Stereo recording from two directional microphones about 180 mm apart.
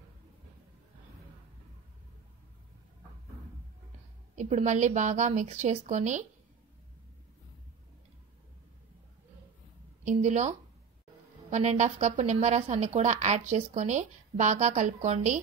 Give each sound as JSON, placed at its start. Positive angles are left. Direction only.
{"t": 4.4, "sound": "a woman's voice", "side_deg": -40}
{"t": 10.0, "sound": "a woman's voice", "side_deg": -40}
{"t": 11.5, "sound": "a woman's voice", "side_deg": -40}